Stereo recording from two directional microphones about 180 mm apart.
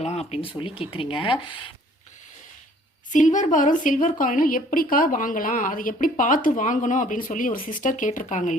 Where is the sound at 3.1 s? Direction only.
45° left (ahead or behind).